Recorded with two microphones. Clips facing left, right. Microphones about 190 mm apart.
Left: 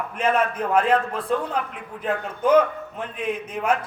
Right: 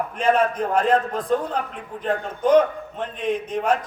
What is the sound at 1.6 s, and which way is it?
Speech, 40° right (ahead or behind).